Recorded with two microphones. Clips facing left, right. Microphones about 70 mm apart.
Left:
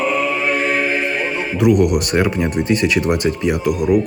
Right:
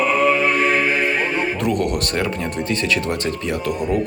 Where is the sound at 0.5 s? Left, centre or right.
Right.